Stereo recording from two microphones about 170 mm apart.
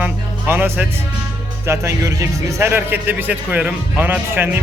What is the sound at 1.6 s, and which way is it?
Speech, 15° right (ahead or behind).